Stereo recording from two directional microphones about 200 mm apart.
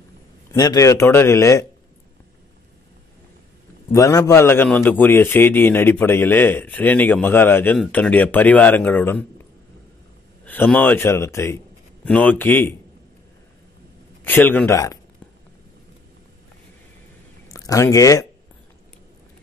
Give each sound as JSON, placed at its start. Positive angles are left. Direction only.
{"t": 0.5, "sound": "a man's voice", "side_deg": 15}
{"t": 3.9, "sound": "a man's voice", "side_deg": 15}
{"t": 10.4, "sound": "a man's voice", "side_deg": 10}
{"t": 14.2, "sound": "a man's voice", "side_deg": 10}
{"t": 17.5, "sound": "speech", "side_deg": 15}